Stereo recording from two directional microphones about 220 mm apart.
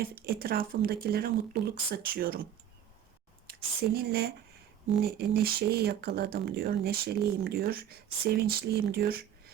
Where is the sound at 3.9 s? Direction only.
45° right (ahead or behind).